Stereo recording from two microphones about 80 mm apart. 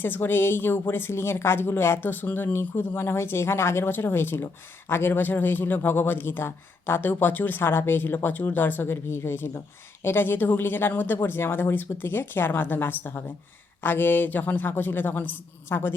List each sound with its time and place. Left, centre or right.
0.0 s a woman's voice: left